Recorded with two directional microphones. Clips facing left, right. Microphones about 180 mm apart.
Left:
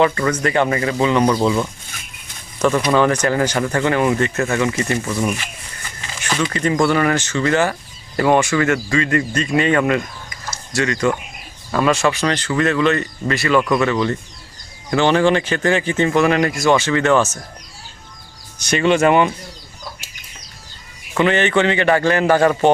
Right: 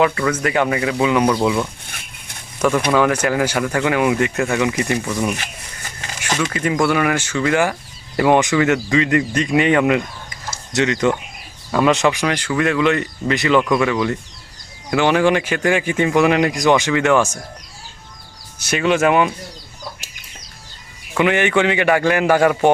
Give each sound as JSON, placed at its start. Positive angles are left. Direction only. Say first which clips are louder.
{"t": 0.0, "sound": "speech", "louder": "left 1 dB", "side_deg": -5}
{"t": 6.5, "sound": "speech", "louder": "left 2 dB", "side_deg": -10}
{"t": 18.6, "sound": "speech", "louder": "left 2 dB", "side_deg": -5}
{"t": 21.2, "sound": "speech", "louder": "even", "side_deg": -10}